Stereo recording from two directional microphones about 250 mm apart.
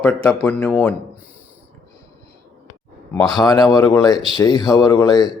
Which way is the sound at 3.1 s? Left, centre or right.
Centre.